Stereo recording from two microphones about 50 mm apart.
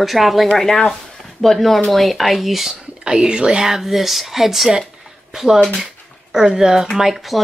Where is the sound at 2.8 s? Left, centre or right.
Centre.